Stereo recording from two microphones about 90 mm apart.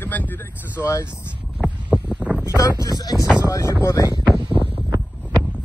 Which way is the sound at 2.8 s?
45° left (ahead or behind).